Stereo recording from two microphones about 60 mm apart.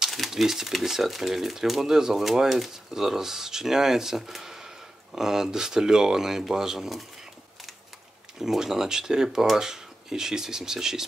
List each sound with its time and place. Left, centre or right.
0.0 s speech: centre
8.4 s speech: centre